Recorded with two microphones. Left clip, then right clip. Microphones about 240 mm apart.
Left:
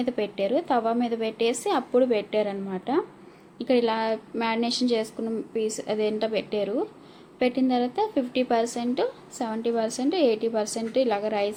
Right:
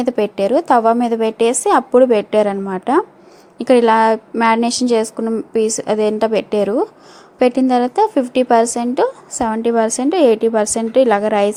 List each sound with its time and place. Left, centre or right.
0.0 s a woman's voice: right